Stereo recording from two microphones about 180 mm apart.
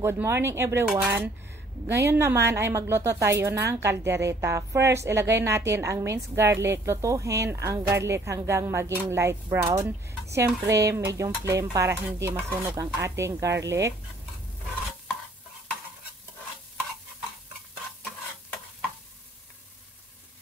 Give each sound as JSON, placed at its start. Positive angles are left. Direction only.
{"t": 0.0, "sound": "a woman's voice", "side_deg": -15}